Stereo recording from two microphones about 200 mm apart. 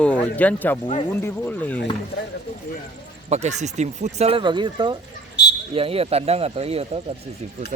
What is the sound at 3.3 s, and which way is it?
Speech, 35° right (ahead or behind).